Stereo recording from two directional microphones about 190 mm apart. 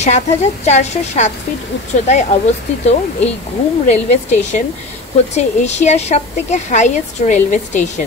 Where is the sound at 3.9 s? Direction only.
35° left (ahead or behind).